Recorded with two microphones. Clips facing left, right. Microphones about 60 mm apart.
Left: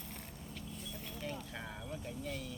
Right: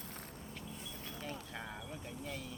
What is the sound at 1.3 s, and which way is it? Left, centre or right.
Vehicle, centre.